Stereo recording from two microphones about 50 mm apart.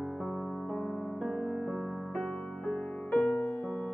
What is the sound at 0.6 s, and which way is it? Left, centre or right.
Music, centre.